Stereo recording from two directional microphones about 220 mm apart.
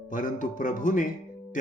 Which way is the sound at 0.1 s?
35° left (ahead or behind).